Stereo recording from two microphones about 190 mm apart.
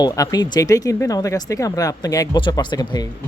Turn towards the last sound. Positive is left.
turn(degrees=20)  # may be behind; listen again after turning